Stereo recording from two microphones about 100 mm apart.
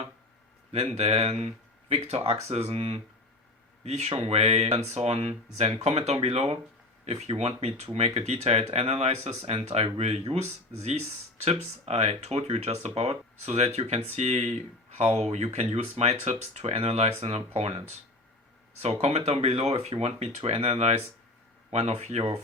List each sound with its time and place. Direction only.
0.9 s speech: 90° right
19.0 s speech: 90° right